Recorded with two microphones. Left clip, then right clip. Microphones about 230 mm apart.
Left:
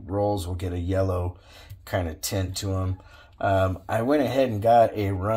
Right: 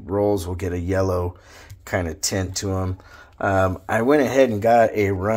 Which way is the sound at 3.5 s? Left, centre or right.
Right.